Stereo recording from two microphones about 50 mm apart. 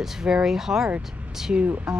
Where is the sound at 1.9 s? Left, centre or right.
Centre.